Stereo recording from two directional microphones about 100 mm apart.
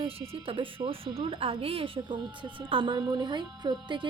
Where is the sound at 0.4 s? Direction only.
60° right (ahead or behind).